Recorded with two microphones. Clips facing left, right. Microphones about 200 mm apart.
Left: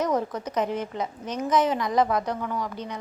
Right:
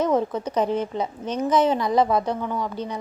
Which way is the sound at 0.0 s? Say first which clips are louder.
Right 4 dB; 25° right (ahead or behind).